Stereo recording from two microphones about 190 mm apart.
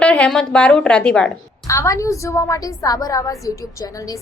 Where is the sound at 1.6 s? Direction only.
15° left (ahead or behind).